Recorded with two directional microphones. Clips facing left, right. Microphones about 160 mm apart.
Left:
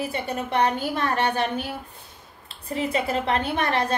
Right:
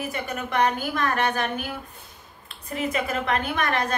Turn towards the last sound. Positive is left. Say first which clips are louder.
# left 2 dB
turn(degrees=30)  # may be behind; listen again after turning